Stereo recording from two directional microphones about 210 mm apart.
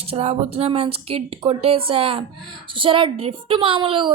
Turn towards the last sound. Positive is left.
turn(degrees=-25)  # may be behind; listen again after turning